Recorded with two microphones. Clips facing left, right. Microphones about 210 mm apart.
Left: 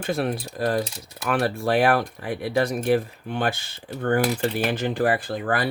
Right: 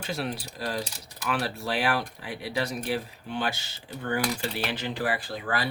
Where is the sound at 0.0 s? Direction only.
55° left (ahead or behind).